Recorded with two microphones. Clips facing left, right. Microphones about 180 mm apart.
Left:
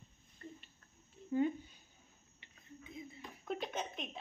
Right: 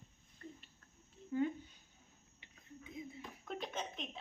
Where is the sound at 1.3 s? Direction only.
20° left (ahead or behind).